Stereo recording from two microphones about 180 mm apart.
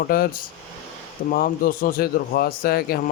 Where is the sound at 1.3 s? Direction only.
50° left (ahead or behind).